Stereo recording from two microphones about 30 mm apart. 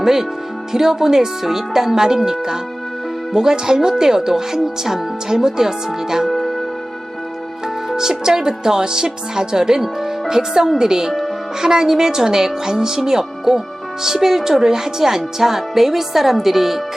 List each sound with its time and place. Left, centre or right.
0.0 s a woman's voice: centre
7.9 s a woman's voice: centre